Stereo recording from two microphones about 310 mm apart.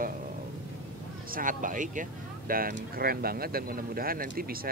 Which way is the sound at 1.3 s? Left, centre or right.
Right.